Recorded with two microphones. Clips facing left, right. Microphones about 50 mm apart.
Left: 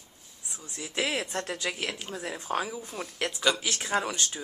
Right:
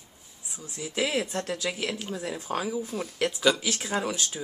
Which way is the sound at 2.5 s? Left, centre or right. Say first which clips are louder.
Right 2 dB; centre.